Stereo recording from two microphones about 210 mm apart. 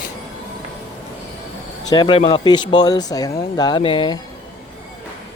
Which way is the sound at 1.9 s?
20° left (ahead or behind).